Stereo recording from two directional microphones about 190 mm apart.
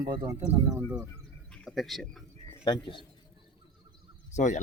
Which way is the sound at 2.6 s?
25° left (ahead or behind).